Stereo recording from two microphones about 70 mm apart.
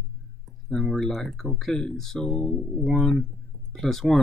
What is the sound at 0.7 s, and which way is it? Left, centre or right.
Speech, centre.